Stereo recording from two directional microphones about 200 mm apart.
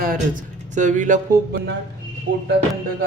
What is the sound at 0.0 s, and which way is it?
Speech, 45° right (ahead or behind).